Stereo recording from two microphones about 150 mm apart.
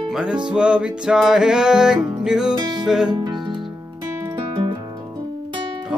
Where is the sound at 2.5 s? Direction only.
30° right (ahead or behind).